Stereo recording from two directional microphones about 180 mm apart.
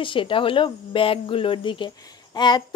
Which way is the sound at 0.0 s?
30° left (ahead or behind).